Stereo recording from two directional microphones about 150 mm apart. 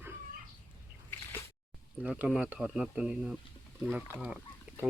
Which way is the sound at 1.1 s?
15° left (ahead or behind).